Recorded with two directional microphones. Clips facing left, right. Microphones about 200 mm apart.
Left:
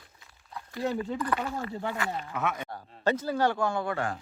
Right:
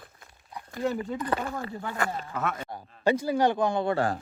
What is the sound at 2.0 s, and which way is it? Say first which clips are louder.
Speech: right 8 dB; 50° right (ahead or behind).